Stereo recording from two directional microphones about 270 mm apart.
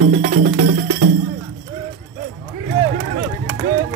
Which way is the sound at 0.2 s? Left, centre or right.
Right.